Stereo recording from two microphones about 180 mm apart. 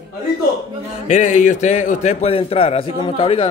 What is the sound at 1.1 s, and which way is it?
A man's voice, 40° left (ahead or behind).